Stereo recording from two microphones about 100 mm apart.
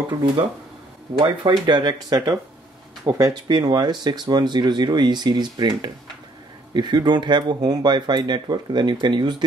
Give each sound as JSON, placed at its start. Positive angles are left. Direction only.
{"t": 1.1, "sound": "speech", "side_deg": -50}